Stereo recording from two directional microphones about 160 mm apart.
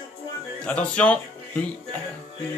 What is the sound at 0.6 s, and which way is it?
Speech, 5° left (ahead or behind).